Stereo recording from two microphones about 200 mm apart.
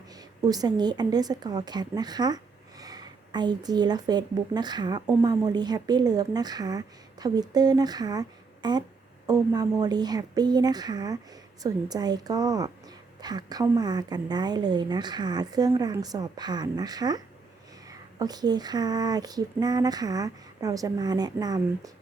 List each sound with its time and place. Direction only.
0.1 s a woman's voice: 20° right (ahead or behind)